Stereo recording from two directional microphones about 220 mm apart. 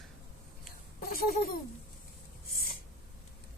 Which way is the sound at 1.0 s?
40° left (ahead or behind).